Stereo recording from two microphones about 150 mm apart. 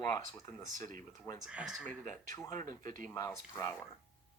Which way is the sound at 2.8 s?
60° right (ahead or behind).